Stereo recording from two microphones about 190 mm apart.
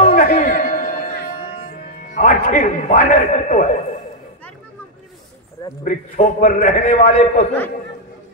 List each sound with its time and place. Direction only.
0.0 s a sound: 45° left (ahead or behind)
2.0 s a man's voice: 40° left (ahead or behind)
5.9 s a man's voice: 45° left (ahead or behind)